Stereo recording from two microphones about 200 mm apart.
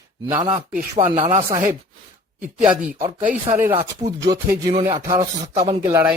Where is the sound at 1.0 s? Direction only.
30° right (ahead or behind).